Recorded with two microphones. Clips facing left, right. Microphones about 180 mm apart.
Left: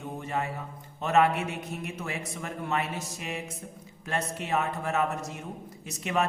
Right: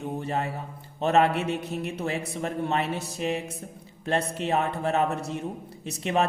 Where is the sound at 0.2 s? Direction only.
35° right (ahead or behind).